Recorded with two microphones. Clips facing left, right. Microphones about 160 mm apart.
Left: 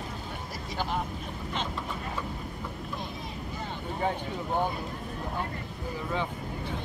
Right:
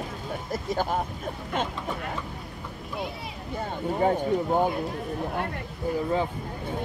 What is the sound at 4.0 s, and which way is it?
Speech, 45° right (ahead or behind).